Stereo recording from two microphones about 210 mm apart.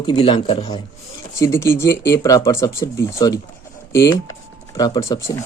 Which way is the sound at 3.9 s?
60° left (ahead or behind).